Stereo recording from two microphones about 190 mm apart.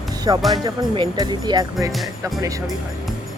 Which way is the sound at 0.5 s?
20° right (ahead or behind).